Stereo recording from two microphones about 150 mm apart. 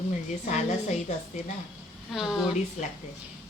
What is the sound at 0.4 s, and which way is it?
Speech, 50° left (ahead or behind).